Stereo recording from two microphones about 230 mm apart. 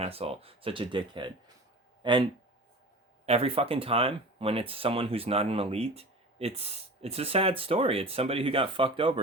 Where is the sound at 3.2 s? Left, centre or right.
Right.